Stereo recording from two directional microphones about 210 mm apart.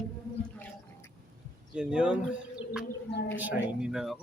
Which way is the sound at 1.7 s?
5° right (ahead or behind).